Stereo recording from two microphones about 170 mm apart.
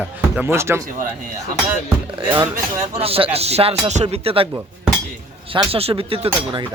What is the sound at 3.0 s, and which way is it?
Speech, 35° right (ahead or behind).